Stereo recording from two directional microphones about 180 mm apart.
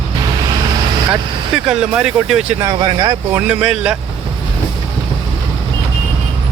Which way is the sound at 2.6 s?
20° right (ahead or behind).